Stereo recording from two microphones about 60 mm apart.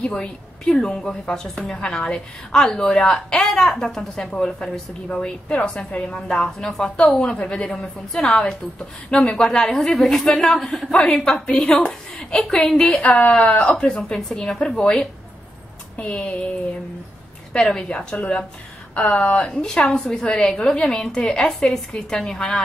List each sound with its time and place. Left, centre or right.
0.0 s a woman's voice: centre
13.0 s speech: left
13.3 s a woman's voice: centre
16.0 s speech: centre
17.5 s a woman's voice: centre